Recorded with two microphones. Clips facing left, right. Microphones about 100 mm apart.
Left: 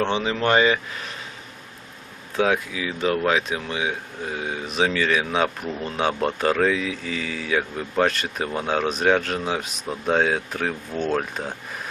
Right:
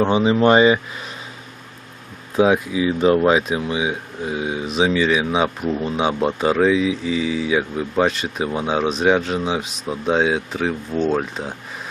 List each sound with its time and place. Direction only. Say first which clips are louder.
0.2 s speech: right 8 dB; 20° right (ahead or behind)
2.3 s speech: right 5 dB; 20° right (ahead or behind)
3.5 s speech: right 5 dB; 15° right (ahead or behind)
4.6 s speech: right 4 dB; 5° right (ahead or behind)